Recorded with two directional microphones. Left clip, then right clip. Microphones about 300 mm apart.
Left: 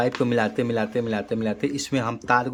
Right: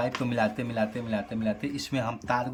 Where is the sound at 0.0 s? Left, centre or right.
Centre.